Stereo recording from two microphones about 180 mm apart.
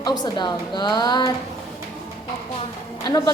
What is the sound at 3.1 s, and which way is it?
Speech, 20° left (ahead or behind).